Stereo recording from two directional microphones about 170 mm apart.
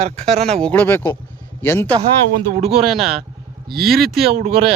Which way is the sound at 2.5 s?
40° right (ahead or behind).